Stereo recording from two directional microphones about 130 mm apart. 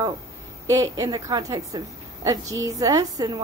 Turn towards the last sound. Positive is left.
turn(degrees=-30)  # may be behind; listen again after turning